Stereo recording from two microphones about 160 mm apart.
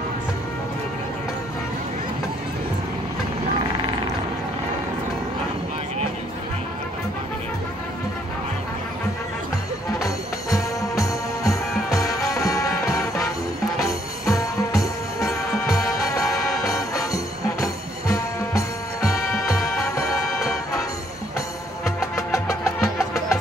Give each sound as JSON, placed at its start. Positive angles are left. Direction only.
{"t": 9.9, "sound": "music", "side_deg": 20}
{"t": 22.1, "sound": "music", "side_deg": 20}